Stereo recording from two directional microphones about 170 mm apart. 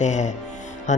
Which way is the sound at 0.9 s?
45° left (ahead or behind).